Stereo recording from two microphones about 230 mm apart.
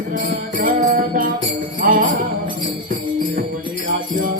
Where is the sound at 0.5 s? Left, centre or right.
Right.